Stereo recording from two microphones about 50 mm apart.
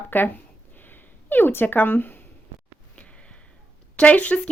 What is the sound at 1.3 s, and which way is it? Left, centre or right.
Speech, left.